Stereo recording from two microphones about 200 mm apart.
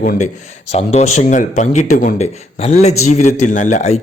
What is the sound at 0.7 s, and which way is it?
Speech, 35° left (ahead or behind).